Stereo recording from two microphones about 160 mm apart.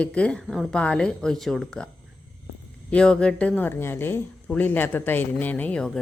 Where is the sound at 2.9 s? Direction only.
5° left (ahead or behind).